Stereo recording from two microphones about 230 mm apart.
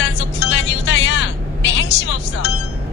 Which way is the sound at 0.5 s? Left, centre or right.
Left.